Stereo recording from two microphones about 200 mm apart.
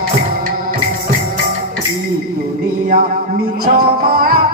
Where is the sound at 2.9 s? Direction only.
45° right (ahead or behind).